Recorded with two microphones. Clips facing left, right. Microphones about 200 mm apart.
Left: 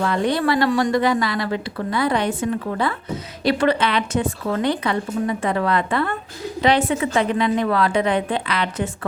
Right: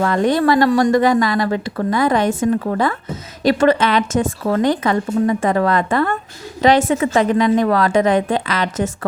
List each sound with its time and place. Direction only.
0.0 s a woman's voice: 45° right (ahead or behind)